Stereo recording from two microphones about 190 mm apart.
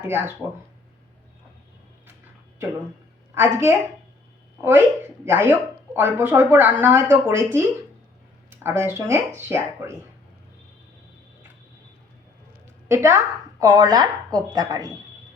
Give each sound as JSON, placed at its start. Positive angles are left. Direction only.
{"t": 0.1, "sound": "speech", "side_deg": -10}
{"t": 3.3, "sound": "speech", "side_deg": -10}
{"t": 12.9, "sound": "a woman's voice", "side_deg": -15}